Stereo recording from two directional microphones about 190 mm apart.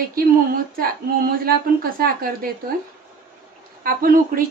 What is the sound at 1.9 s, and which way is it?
Speech, 50° right (ahead or behind).